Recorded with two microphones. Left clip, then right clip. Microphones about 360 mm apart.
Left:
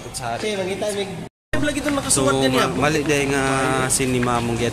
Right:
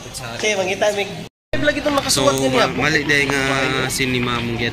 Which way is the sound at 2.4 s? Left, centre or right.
Centre.